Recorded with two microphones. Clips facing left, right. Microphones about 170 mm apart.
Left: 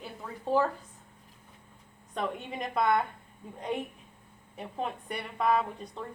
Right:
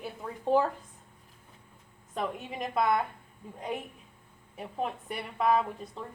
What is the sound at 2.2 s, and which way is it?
Speech, 5° right (ahead or behind).